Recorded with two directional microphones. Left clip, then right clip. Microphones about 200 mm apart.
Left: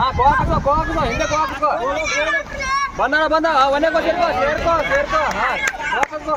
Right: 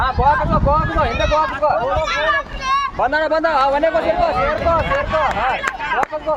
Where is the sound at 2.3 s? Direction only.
25° left (ahead or behind).